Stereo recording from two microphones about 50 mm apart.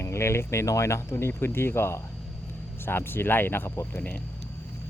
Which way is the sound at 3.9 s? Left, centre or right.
Left.